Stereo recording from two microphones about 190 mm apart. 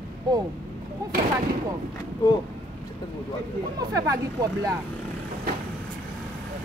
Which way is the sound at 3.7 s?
20° right (ahead or behind).